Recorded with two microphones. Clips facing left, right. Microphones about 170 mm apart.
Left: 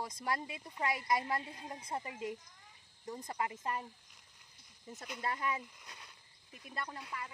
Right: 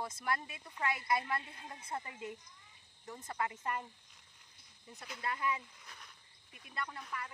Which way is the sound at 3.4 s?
25° left (ahead or behind).